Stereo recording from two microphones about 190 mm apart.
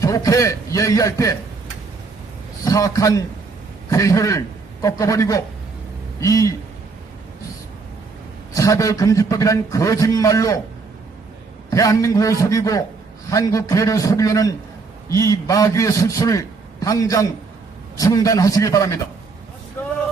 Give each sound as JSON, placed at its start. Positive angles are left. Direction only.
{"t": 0.0, "sound": "a man's voice", "side_deg": 15}
{"t": 2.6, "sound": "a man's voice", "side_deg": 20}
{"t": 8.5, "sound": "a man's voice", "side_deg": 15}
{"t": 11.7, "sound": "a man's voice", "side_deg": 15}